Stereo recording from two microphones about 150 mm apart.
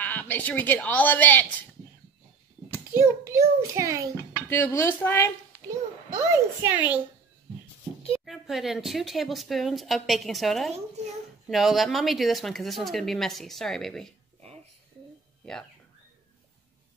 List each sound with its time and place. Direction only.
0.0 s speech: 10° left (ahead or behind)
2.9 s a child's voice: 20° right (ahead or behind)
4.5 s speech: 15° left (ahead or behind)
6.1 s speech: 15° right (ahead or behind)
8.1 s speech: centre (ahead or behind)